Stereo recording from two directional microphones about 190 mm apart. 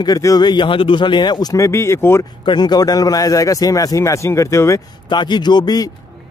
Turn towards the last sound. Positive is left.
turn(degrees=20)  # may be behind; listen again after turning